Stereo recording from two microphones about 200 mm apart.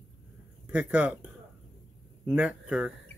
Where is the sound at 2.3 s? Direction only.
5° right (ahead or behind).